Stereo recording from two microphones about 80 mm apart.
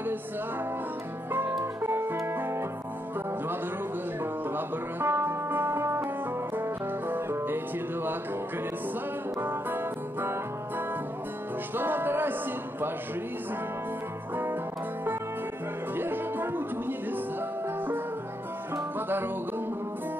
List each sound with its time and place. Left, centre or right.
1.6 s music: right
4.2 s music: right
9.4 s music: right
11.7 s music: right
14.3 s music: right
16.0 s music: right
18.9 s music: right